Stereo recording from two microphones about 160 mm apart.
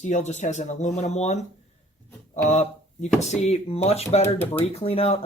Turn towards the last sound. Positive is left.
turn(degrees=40)  # may be behind; listen again after turning